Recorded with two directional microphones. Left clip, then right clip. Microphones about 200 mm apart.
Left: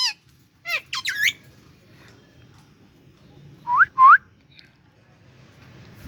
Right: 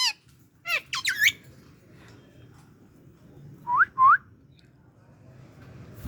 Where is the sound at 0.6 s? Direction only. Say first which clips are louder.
Left 1 dB; 30° left (ahead or behind).